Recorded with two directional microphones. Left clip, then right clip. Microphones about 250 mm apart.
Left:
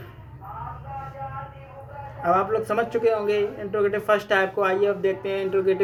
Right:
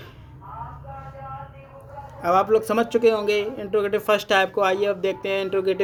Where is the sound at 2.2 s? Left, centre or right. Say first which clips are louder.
Right 3 dB; right.